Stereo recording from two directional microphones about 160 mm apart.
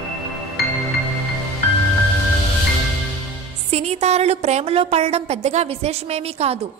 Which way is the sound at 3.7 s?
40° right (ahead or behind).